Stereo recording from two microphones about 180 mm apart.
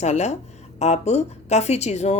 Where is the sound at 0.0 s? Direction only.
40° left (ahead or behind).